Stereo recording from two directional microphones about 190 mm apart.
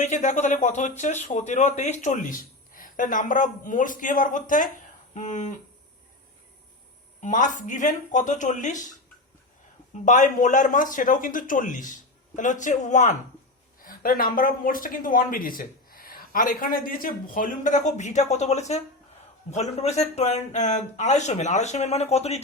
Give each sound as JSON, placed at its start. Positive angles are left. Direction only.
{"t": 0.0, "sound": "speech", "side_deg": 40}
{"t": 7.2, "sound": "speech", "side_deg": 40}